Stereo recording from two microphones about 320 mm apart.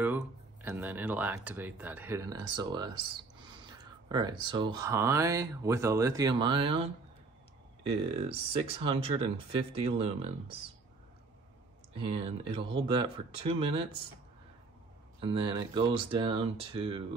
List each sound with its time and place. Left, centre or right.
0.0 s speech: centre
11.9 s speech: centre
15.1 s speech: centre